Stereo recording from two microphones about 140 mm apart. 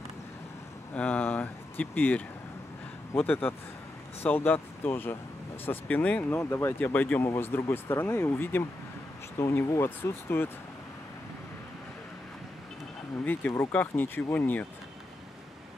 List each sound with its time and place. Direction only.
0.9 s speech: 10° left (ahead or behind)
13.2 s speech: 10° left (ahead or behind)